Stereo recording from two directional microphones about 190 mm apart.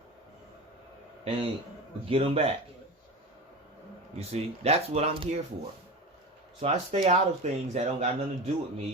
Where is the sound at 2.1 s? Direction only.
30° right (ahead or behind).